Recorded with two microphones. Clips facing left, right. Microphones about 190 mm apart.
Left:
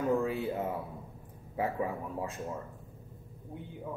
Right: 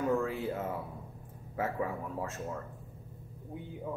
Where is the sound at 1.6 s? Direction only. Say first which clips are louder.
Left 1 dB; 15° left (ahead or behind).